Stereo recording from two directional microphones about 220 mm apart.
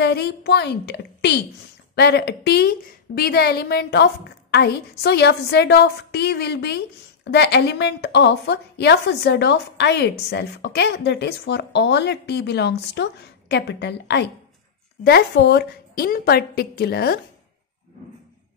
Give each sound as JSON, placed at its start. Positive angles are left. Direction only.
{"t": 0.0, "sound": "a woman's voice", "side_deg": 50}